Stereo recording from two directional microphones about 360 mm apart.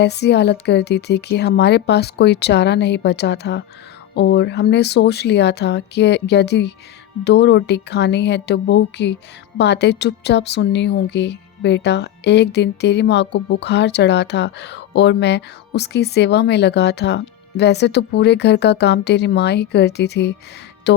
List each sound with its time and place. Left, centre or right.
0.0 s a woman's voice: left